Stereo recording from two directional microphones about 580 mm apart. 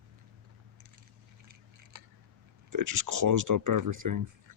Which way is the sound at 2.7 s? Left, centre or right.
Right.